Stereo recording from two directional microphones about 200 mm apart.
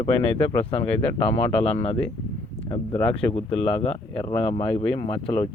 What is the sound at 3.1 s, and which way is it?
Speech, 30° left (ahead or behind).